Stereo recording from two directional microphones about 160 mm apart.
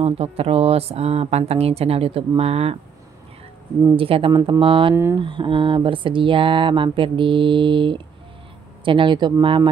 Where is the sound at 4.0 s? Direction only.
35° right (ahead or behind).